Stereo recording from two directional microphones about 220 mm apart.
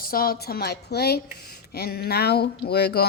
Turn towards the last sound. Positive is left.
turn(degrees=45)  # may be behind; listen again after turning